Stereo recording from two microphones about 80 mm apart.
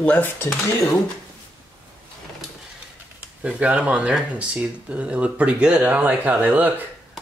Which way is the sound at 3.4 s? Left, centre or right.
Centre.